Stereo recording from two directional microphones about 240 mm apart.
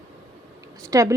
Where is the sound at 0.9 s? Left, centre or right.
Centre.